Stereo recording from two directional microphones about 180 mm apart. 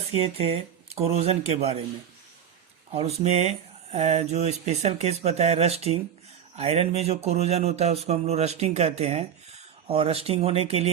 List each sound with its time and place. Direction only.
0.1 s speech: 35° right (ahead or behind)
2.9 s speech: 35° right (ahead or behind)